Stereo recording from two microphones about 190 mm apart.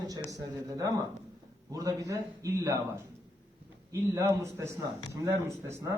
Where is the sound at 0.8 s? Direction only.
15° right (ahead or behind).